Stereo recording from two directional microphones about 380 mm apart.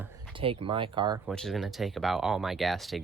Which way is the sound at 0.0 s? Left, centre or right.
Centre.